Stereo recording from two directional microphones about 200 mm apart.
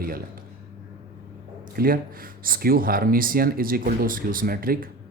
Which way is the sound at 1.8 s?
45° right (ahead or behind).